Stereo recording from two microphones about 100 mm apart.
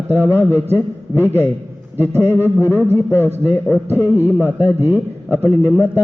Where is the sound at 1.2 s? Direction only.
20° left (ahead or behind).